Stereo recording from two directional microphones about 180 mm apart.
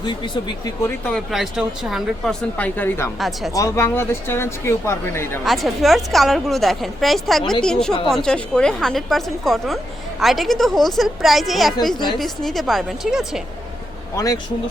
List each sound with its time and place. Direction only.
0.0 s speech: 25° left (ahead or behind)
0.9 s a woman's voice: 5° left (ahead or behind)
2.6 s speech: 10° left (ahead or behind)
3.2 s a woman's voice: centre (ahead or behind)
3.5 s speech: 15° left (ahead or behind)
5.5 s a woman's voice: centre (ahead or behind)